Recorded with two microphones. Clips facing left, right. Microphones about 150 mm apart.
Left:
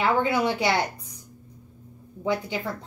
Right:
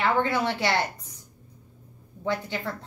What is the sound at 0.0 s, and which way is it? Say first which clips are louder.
Speech: left 2 dB; 10° left (ahead or behind).